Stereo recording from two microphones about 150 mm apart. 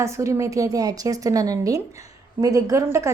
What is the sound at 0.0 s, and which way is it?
A woman's voice, 20° right (ahead or behind).